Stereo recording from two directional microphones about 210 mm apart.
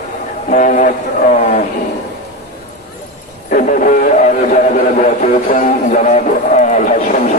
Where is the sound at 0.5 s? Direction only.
35° left (ahead or behind).